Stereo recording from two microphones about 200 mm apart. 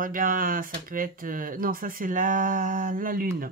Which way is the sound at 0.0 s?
45° right (ahead or behind).